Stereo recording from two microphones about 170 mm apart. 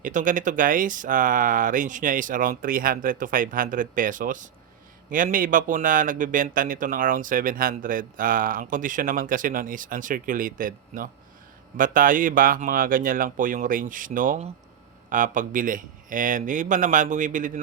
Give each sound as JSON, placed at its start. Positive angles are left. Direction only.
{"t": 0.0, "sound": "a man's voice", "side_deg": -50}